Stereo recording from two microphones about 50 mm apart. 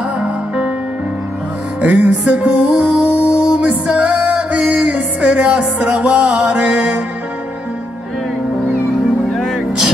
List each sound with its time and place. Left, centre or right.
1.9 s music: centre
9.3 s music: centre